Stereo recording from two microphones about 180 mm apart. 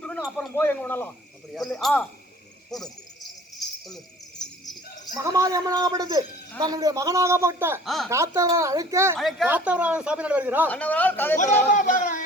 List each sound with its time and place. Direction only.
0.0 s speech: 5° left (ahead or behind)
2.6 s a sound: centre (ahead or behind)
5.1 s a man's voice: 15° right (ahead or behind)
7.9 s speech: centre (ahead or behind)
8.1 s a man's voice: 15° right (ahead or behind)
9.1 s a man's voice: centre (ahead or behind)
10.7 s speech: 10° left (ahead or behind)
11.3 s speech: 45° left (ahead or behind)